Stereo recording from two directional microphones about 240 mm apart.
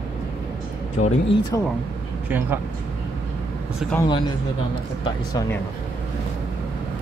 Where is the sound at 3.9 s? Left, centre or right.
Centre.